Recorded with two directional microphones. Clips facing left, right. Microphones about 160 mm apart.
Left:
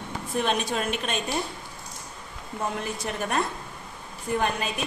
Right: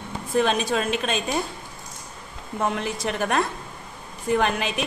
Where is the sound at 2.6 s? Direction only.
90° right.